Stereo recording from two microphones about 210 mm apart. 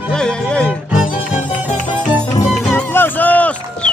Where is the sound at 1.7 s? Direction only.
20° left (ahead or behind).